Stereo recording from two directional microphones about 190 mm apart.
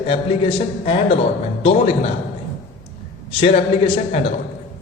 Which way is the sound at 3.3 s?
30° left (ahead or behind).